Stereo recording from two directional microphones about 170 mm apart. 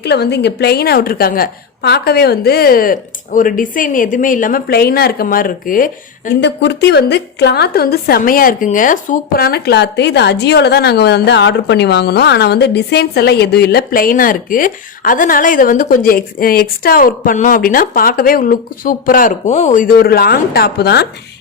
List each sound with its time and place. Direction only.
0.0 s a woman's voice: 80° left; by 6.3 s 55° left (ahead or behind)
6.4 s a woman's voice: 80° left